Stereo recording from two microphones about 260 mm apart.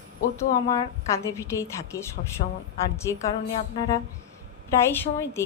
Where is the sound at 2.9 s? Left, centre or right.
Centre.